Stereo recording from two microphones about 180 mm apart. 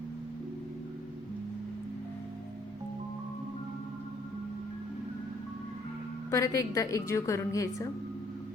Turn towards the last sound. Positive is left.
turn(degrees=15)  # may be behind; listen again after turning